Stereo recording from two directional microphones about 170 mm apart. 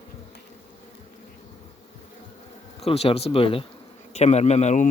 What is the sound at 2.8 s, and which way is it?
Speech, 35° left (ahead or behind).